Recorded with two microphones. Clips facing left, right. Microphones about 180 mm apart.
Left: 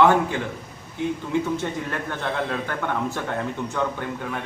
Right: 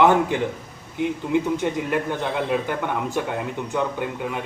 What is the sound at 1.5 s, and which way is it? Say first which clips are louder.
Speech: right 5 dB; 15° right (ahead or behind).